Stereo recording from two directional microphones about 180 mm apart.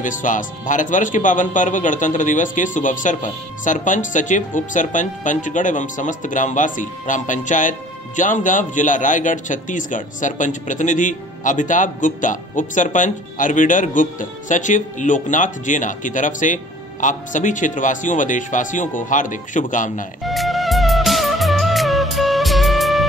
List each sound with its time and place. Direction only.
0.0 s speech: 45° left (ahead or behind)
20.2 s music: centre (ahead or behind)